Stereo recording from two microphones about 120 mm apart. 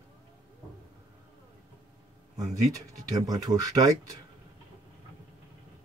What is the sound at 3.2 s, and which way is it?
Speech, 30° right (ahead or behind).